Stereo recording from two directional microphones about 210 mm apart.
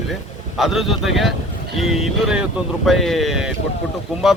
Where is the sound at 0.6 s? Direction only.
Centre (ahead or behind).